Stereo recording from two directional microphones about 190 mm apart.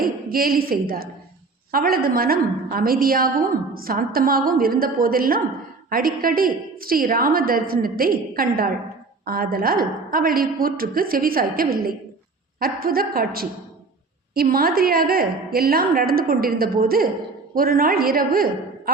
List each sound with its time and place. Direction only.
0.0 s a woman's voice: 50° right (ahead or behind)